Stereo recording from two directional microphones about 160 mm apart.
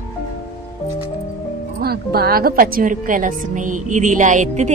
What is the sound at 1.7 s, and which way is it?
A woman's voice, 75° right (ahead or behind).